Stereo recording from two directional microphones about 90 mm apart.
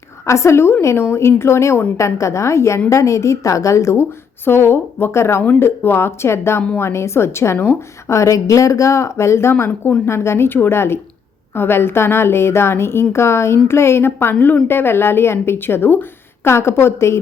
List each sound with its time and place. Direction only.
0.3 s a woman's voice: 30° left (ahead or behind)